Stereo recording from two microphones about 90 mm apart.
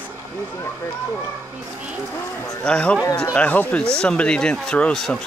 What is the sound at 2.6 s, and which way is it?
Speech, 10° left (ahead or behind).